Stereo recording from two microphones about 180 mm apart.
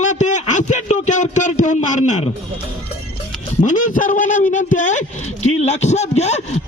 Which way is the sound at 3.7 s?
45° left (ahead or behind).